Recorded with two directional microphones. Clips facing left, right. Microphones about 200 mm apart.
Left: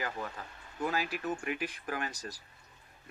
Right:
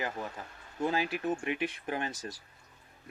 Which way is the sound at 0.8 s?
25° right (ahead or behind).